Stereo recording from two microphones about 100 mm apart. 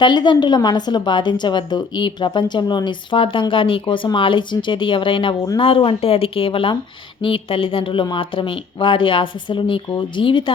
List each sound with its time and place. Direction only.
0.0 s a woman's voice: 50° left (ahead or behind)